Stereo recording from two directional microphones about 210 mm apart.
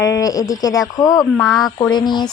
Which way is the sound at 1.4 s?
Centre (ahead or behind).